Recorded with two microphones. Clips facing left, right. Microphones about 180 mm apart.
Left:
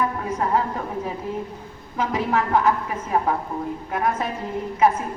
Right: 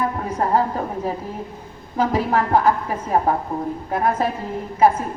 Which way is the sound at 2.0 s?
35° right (ahead or behind).